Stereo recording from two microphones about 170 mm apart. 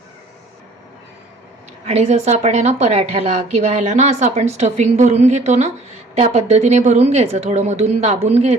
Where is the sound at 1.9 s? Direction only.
40° right (ahead or behind).